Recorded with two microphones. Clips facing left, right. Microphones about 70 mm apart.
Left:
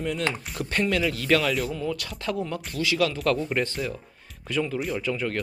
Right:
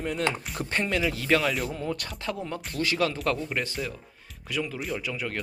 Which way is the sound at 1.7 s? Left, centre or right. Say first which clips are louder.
Left 2 dB; right.